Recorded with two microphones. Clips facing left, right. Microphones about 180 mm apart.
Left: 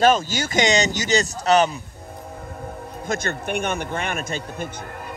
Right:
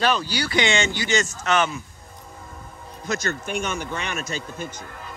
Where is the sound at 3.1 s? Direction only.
55° left (ahead or behind).